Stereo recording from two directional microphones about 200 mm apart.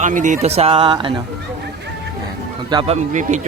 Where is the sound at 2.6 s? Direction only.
25° right (ahead or behind).